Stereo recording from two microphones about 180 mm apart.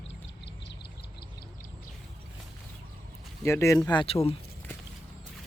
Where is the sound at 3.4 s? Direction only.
15° left (ahead or behind).